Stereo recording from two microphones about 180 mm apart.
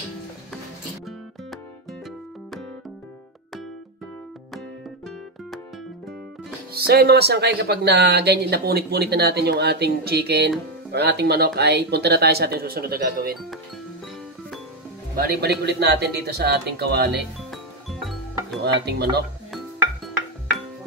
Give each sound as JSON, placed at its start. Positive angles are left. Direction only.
{"t": 6.7, "sound": "speech", "side_deg": -60}
{"t": 15.1, "sound": "speech", "side_deg": -60}
{"t": 17.5, "sound": "music", "side_deg": 0}
{"t": 18.6, "sound": "speech", "side_deg": -65}